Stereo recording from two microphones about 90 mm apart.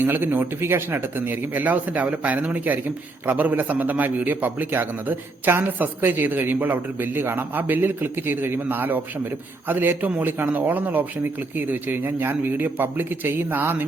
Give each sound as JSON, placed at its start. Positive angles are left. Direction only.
{"t": 0.0, "sound": "a man's voice", "side_deg": -25}